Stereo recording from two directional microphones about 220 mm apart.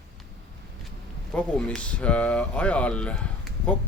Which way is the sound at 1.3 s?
5° left (ahead or behind).